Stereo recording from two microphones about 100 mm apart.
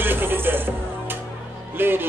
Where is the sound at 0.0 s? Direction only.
20° right (ahead or behind).